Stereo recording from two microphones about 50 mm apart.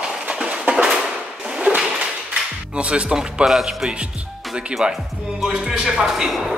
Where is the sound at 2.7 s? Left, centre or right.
Right.